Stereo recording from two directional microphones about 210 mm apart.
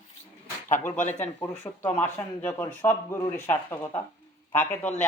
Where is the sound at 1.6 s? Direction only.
10° left (ahead or behind).